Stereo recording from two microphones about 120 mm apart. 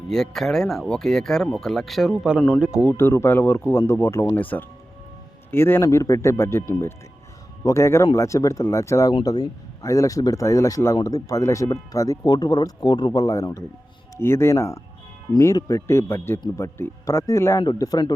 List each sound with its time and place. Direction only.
0.1 s speech: 5° left (ahead or behind)
2.8 s speech: 20° left (ahead or behind)